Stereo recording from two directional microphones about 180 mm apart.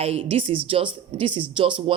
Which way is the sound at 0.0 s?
30° right (ahead or behind).